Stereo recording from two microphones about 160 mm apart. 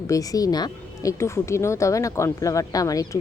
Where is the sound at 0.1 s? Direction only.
20° left (ahead or behind).